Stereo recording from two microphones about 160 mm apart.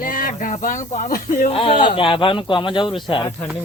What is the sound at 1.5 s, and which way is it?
Speech, 35° left (ahead or behind).